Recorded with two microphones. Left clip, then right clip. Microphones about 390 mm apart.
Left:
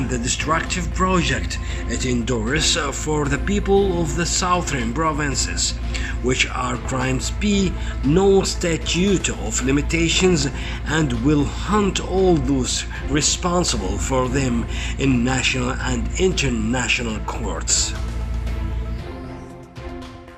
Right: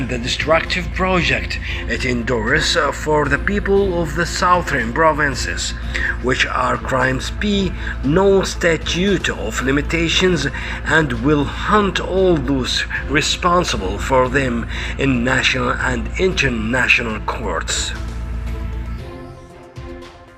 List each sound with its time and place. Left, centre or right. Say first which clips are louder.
0.1 s speech: right 6 dB; centre